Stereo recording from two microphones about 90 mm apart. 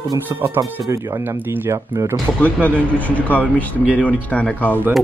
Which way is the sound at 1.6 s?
35° right (ahead or behind).